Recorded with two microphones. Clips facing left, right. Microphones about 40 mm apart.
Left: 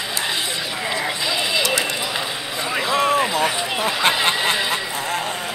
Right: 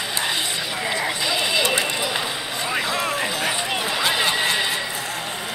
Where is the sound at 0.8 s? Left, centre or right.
Centre.